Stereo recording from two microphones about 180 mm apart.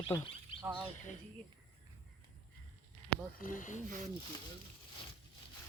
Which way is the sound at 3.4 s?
45° left (ahead or behind).